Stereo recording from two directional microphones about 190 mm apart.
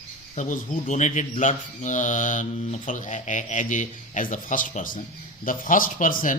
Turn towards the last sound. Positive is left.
turn(degrees=45)  # may be behind; listen again after turning